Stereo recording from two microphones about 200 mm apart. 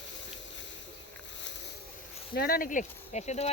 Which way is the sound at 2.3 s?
50° left (ahead or behind).